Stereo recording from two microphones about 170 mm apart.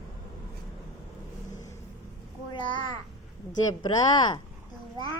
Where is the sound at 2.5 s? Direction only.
30° left (ahead or behind).